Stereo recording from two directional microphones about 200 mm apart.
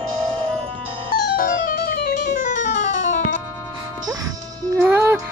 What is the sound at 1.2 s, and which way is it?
Music, 45° left (ahead or behind).